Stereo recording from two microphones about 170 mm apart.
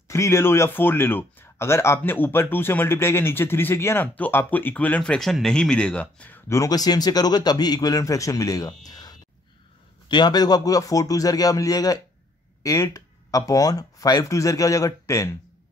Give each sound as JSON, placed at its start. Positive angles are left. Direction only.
{"t": 0.1, "sound": "speech", "side_deg": 15}